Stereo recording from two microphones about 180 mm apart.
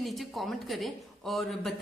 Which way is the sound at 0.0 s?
Centre (ahead or behind).